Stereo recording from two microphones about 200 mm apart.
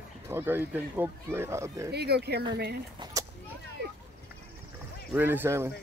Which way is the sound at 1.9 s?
55° right (ahead or behind).